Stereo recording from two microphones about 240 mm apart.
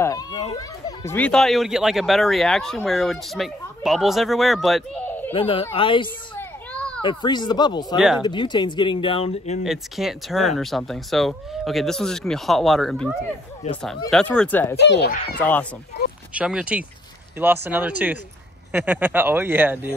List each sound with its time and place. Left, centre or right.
0.0 s speech: centre
5.3 s speech: left
9.6 s speech: centre
14.8 s speech: left
16.3 s speech: centre